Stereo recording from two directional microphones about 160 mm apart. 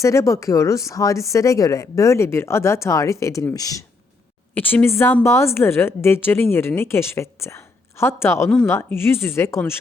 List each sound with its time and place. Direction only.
0.0 s speech: 20° left (ahead or behind)
4.5 s a woman's voice: 10° left (ahead or behind)